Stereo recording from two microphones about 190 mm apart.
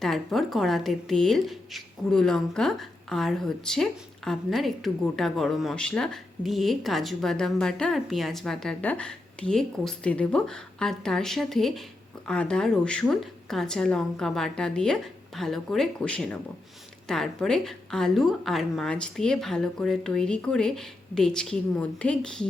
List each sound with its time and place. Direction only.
0.0 s a woman's voice: centre (ahead or behind)